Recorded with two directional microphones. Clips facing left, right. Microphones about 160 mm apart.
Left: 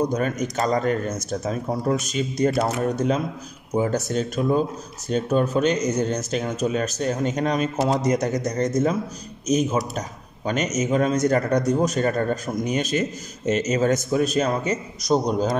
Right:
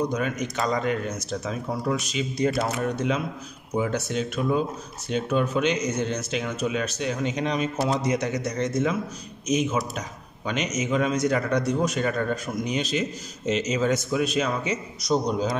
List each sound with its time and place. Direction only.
0.1 s a man's voice: 45° left (ahead or behind)